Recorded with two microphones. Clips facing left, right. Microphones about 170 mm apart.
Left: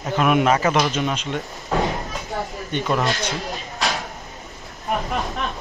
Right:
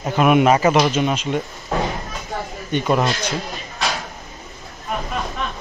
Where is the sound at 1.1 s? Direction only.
5° right (ahead or behind).